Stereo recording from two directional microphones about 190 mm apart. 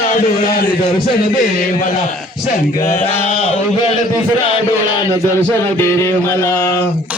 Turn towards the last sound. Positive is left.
turn(degrees=15)  # may be behind; listen again after turning